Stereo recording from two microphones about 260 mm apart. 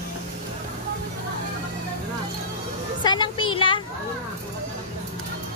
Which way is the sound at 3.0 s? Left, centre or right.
Centre.